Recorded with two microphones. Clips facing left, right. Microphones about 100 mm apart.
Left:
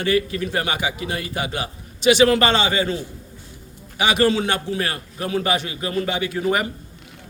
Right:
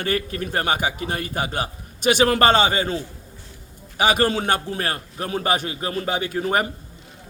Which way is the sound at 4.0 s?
45° right (ahead or behind).